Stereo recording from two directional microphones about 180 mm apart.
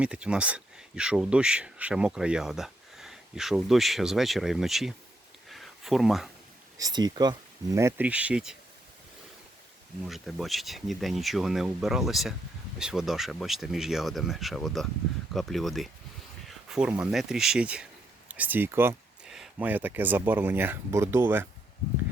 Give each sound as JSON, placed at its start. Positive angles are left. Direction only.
{"t": 0.0, "sound": "speech", "side_deg": -5}
{"t": 5.5, "sound": "a sound", "side_deg": 0}
{"t": 6.7, "sound": "speech", "side_deg": -20}
{"t": 10.1, "sound": "speech", "side_deg": 0}